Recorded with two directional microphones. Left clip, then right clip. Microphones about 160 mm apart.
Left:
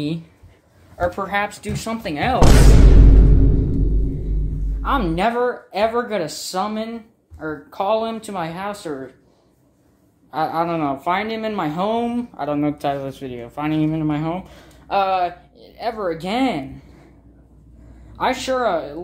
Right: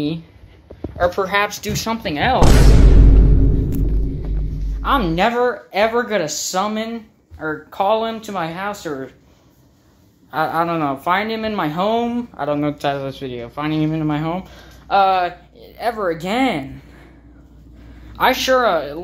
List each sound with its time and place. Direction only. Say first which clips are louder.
0.9 s speech: right 4 dB; 5° left (ahead or behind)
4.8 s speech: right 3 dB; 5° right (ahead or behind)
10.3 s speech: right 2 dB; centre (ahead or behind)
18.1 s speech: right 6 dB; 5° right (ahead or behind)